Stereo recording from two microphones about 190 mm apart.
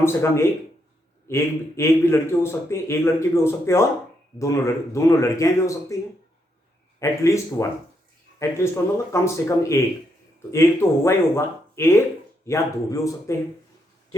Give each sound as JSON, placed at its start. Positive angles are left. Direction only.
{"t": 0.0, "sound": "a man's voice", "side_deg": 15}
{"t": 7.0, "sound": "a man's voice", "side_deg": 15}